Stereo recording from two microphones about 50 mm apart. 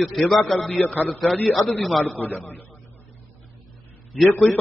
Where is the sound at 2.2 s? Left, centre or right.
Left.